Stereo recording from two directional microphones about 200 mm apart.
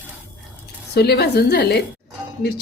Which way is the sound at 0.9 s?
55° left (ahead or behind).